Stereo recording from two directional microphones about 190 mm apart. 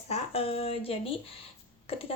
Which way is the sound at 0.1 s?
30° left (ahead or behind).